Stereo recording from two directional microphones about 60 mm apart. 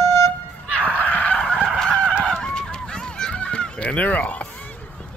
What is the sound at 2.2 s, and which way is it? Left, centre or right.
Run, centre.